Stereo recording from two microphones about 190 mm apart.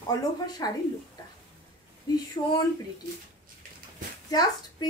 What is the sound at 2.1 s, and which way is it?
Speech, 20° left (ahead or behind).